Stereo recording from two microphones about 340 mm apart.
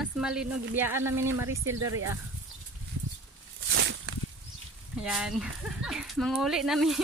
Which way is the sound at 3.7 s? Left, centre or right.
Right.